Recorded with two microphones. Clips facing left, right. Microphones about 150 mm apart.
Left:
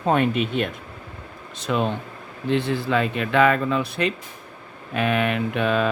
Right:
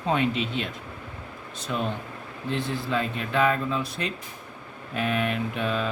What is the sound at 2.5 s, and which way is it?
Speech, 70° left (ahead or behind).